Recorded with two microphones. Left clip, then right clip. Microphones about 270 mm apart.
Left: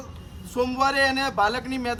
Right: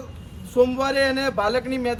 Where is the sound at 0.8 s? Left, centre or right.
Centre.